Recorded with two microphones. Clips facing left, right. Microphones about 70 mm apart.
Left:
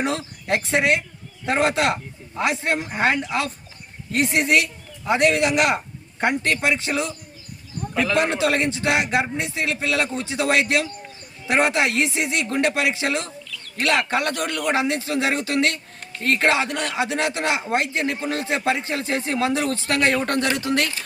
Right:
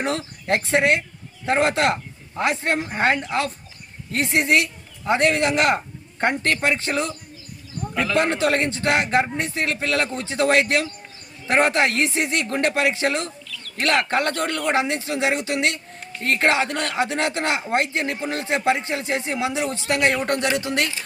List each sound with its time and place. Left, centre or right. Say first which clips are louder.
0.0 s a man's voice: even; left
0.6 s speech: right 1 dB; right
8.4 s speech: even; right
10.0 s a man's voice: left 1 dB; left
10.4 s speech: right 2 dB; right